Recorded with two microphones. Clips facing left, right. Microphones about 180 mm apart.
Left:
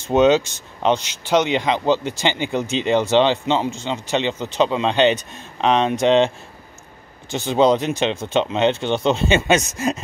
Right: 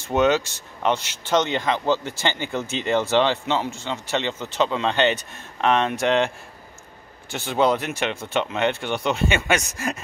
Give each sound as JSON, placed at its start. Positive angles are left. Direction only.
{"t": 0.0, "sound": "speech", "side_deg": 20}